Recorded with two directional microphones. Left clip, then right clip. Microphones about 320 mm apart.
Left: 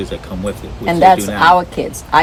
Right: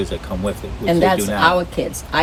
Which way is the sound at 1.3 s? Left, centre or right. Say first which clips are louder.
Left 5 dB; centre.